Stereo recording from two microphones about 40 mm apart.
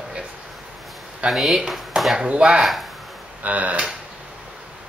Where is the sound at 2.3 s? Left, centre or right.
Right.